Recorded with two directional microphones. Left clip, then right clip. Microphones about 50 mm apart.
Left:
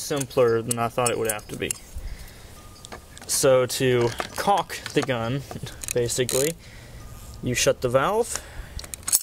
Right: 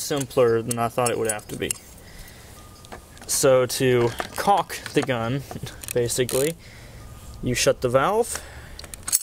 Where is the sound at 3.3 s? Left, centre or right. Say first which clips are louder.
Right 1 dB; right.